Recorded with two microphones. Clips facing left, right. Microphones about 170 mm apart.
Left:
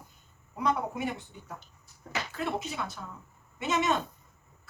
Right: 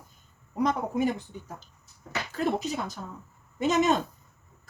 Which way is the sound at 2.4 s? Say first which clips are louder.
Right 6 dB; 40° right (ahead or behind).